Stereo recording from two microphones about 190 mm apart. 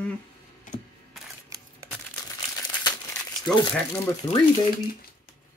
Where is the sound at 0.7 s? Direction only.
40° left (ahead or behind).